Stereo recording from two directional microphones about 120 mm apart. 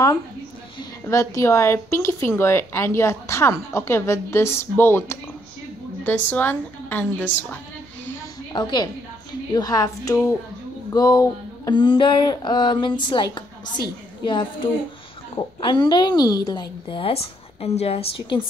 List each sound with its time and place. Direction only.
1.0 s a woman's voice: 25° left (ahead or behind)
8.5 s speech: 40° left (ahead or behind)
10.9 s a sound: 30° left (ahead or behind)
11.7 s speech: 45° left (ahead or behind)